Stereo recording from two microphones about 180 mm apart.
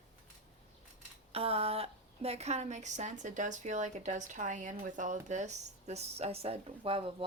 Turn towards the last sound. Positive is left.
turn(degrees=-30)  # may be behind; listen again after turning